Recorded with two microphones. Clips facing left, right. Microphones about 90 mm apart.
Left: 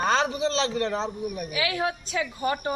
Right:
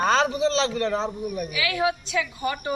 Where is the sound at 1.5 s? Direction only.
40° left (ahead or behind).